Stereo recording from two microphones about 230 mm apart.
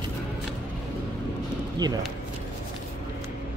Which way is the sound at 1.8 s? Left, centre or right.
Centre.